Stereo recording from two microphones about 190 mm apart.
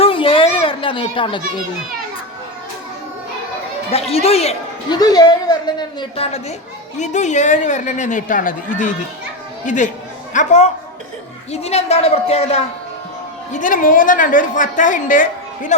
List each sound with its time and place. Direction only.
0.0 s a sound: 30° left (ahead or behind)
3.9 s speech: 30° left (ahead or behind)
4.9 s a woman's voice: 20° left (ahead or behind)
13.5 s a woman's voice: 45° left (ahead or behind)